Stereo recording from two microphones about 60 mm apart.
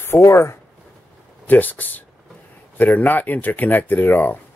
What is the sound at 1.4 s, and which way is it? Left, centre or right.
Speech, left.